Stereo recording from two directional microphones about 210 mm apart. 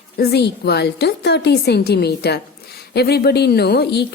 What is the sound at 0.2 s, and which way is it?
A woman's voice, 50° left (ahead or behind).